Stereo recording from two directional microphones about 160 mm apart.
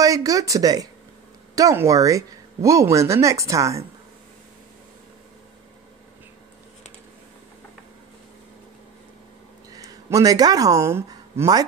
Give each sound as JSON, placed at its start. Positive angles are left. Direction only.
{"t": 0.0, "sound": "speech", "side_deg": -20}
{"t": 9.7, "sound": "speech", "side_deg": -20}